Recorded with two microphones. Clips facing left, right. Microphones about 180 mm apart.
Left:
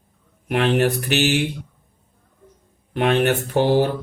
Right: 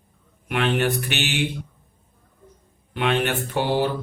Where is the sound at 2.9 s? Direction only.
40° left (ahead or behind).